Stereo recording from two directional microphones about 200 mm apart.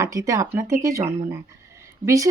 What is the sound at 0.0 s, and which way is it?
Speech, 15° right (ahead or behind).